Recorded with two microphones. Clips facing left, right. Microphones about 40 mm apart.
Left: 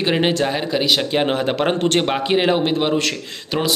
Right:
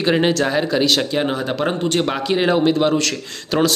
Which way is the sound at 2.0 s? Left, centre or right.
Left.